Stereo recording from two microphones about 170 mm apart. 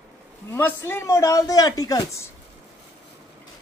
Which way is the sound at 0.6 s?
15° left (ahead or behind).